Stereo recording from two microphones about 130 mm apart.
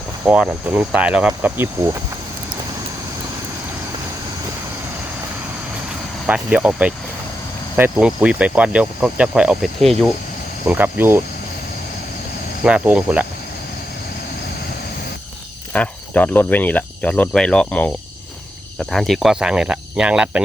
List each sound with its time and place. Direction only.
0.3 s speech: 10° right (ahead or behind)
6.2 s speech: 10° right (ahead or behind)
10.7 s speech: 15° right (ahead or behind)
12.6 s speech: 10° right (ahead or behind)
15.7 s speech: 10° left (ahead or behind); by 20.4 s 10° right (ahead or behind)